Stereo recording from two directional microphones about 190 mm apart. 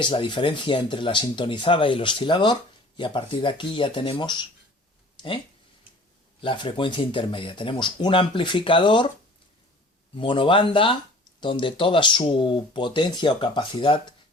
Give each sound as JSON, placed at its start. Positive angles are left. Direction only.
{"t": 0.0, "sound": "speech", "side_deg": 25}
{"t": 6.4, "sound": "speech", "side_deg": 25}
{"t": 10.2, "sound": "speech", "side_deg": 25}